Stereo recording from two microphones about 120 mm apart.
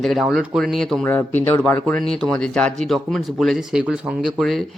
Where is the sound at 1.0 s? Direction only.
15° left (ahead or behind).